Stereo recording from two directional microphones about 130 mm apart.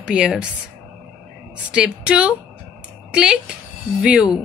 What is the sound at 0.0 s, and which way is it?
Speech, 5° right (ahead or behind).